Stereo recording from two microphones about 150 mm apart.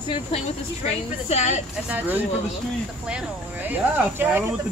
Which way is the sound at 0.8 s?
45° left (ahead or behind).